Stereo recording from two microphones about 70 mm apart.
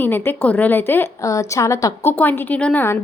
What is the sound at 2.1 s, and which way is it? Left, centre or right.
Speech, left.